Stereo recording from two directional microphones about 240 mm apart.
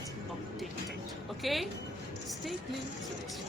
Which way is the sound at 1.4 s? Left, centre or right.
Centre.